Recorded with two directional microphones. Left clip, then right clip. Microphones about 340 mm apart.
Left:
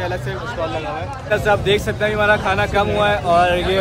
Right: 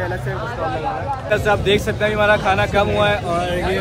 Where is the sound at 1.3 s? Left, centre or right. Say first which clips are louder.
Left 1 dB; centre.